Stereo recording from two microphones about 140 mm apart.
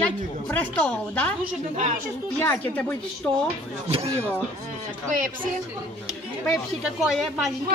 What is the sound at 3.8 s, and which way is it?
Speech, 45° right (ahead or behind).